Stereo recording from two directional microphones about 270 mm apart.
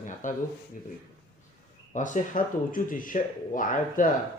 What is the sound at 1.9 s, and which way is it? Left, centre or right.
Speech, left.